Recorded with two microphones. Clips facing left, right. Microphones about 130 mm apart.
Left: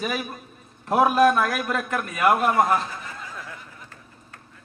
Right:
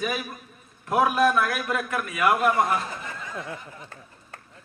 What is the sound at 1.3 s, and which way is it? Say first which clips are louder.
A man's voice: left 1 dB; 40° left (ahead or behind).